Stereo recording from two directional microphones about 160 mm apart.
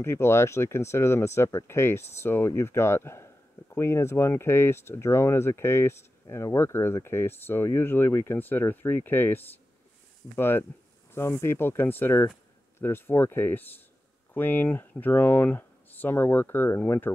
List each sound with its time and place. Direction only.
0.0 s speech: 15° left (ahead or behind)